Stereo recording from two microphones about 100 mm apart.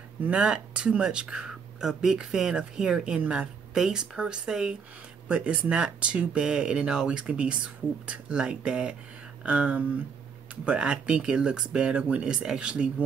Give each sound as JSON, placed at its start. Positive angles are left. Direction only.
{"t": 0.2, "sound": "speech", "side_deg": -10}